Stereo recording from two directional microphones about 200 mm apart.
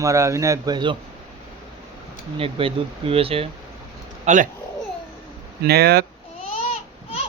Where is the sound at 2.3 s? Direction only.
30° right (ahead or behind).